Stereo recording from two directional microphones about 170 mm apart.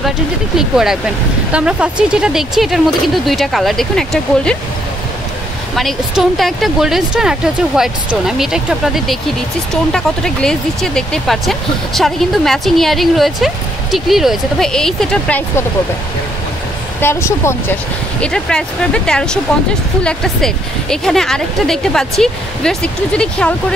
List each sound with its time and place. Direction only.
0.6 s speech: 5° right (ahead or behind)
5.8 s speech: centre (ahead or behind)
17.0 s a woman's voice: 15° left (ahead or behind)
18.2 s speech: 5° left (ahead or behind)